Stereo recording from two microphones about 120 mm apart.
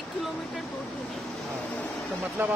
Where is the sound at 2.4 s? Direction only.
15° right (ahead or behind).